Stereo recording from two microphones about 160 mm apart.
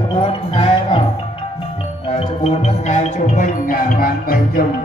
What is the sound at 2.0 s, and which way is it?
Music, 40° left (ahead or behind).